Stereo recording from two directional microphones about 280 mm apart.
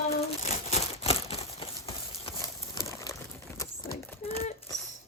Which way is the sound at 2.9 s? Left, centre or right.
Centre.